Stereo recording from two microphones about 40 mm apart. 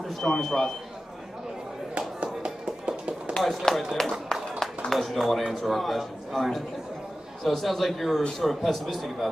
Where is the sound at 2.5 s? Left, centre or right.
Right.